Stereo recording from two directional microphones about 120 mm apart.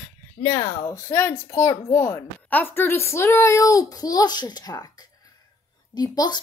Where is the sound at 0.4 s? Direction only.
25° left (ahead or behind).